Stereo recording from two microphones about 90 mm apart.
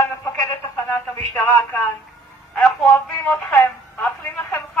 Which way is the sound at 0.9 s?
25° left (ahead or behind).